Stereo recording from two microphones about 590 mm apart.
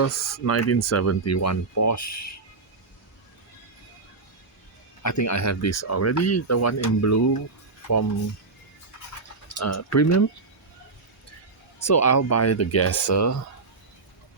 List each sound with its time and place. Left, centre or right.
0.0 s speech: left
5.0 s speech: left
9.6 s speech: left
11.9 s speech: left